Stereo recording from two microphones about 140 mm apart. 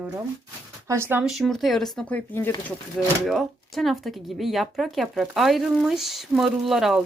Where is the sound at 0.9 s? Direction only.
15° right (ahead or behind).